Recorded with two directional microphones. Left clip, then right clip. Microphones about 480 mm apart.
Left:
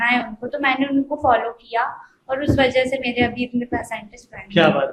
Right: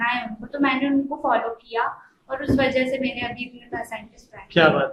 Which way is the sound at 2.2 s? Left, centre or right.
Left.